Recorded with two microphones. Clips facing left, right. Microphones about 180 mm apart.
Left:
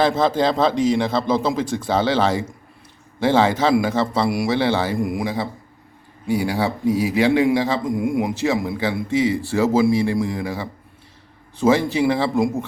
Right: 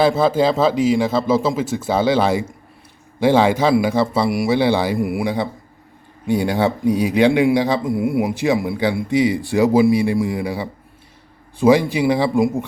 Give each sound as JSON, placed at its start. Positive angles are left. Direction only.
{"t": 0.0, "sound": "a man's voice", "side_deg": -10}
{"t": 5.2, "sound": "a man's voice", "side_deg": -20}